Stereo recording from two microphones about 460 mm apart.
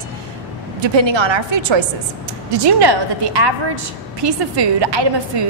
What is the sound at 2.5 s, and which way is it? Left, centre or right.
A woman's voice, right.